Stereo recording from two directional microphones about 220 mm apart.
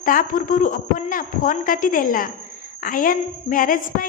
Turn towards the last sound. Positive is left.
turn(degrees=40)  # may be behind; listen again after turning